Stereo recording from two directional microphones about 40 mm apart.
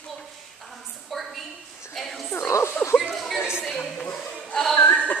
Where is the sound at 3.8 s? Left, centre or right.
Left.